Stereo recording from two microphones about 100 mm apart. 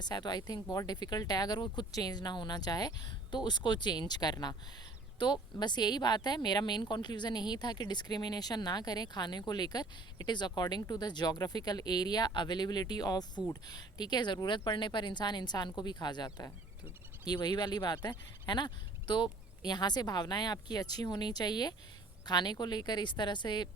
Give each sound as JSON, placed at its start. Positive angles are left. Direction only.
{"t": 0.0, "sound": "speech", "side_deg": 45}